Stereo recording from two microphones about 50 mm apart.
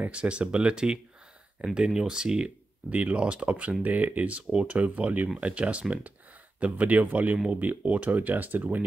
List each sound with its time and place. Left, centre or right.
0.1 s speech: right
2.9 s speech: right